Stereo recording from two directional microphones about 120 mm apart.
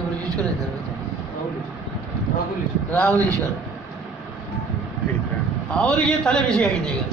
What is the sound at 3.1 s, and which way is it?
Speech, 25° right (ahead or behind).